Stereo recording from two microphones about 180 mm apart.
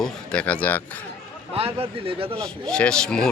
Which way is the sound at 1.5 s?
35° right (ahead or behind).